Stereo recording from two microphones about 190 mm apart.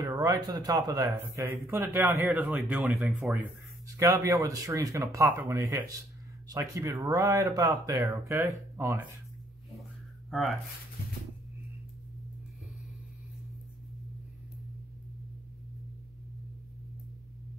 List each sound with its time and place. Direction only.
0.0 s speech: 20° right (ahead or behind); by 3.3 s centre (ahead or behind)
3.8 s speech: 15° right (ahead or behind)
10.3 s speech: centre (ahead or behind)